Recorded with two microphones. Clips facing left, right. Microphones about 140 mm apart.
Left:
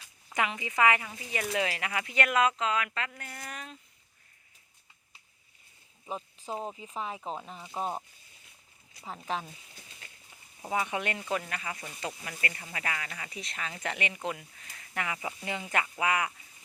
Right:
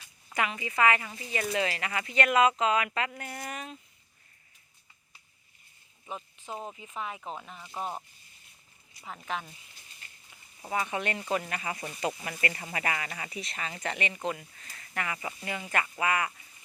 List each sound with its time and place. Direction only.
0.3 s speech: 20° left (ahead or behind); by 2.5 s centre (ahead or behind)
2.5 s speech: 15° right (ahead or behind)
6.1 s speech: 35° left (ahead or behind)
9.0 s speech: 30° left (ahead or behind)
10.6 s speech: 15° left (ahead or behind); by 11.7 s 5° right (ahead or behind)
12.8 s speech: 25° right (ahead or behind)
13.3 s speech: centre (ahead or behind)
15.4 s speech: 15° left (ahead or behind)